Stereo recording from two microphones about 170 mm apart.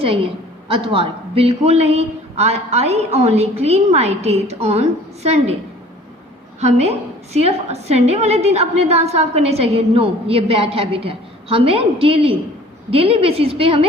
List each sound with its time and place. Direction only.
0.7 s a woman's voice: 35° right (ahead or behind)
6.6 s a woman's voice: 40° right (ahead or behind)